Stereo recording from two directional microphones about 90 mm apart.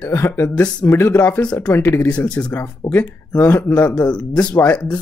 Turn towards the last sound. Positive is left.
turn(degrees=20)  # may be behind; listen again after turning